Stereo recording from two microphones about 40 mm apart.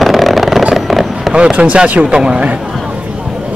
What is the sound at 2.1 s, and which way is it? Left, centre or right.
Speech, right.